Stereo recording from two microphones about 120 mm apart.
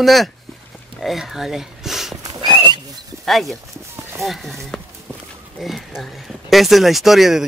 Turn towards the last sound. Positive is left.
turn(degrees=0)  # may be behind; listen again after turning